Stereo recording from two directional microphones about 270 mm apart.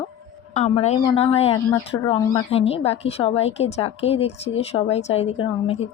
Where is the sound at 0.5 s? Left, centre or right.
Left.